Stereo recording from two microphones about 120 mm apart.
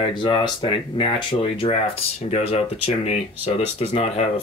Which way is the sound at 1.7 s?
60° left (ahead or behind).